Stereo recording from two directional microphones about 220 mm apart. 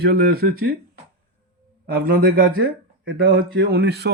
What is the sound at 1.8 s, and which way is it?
Speech, 45° right (ahead or behind).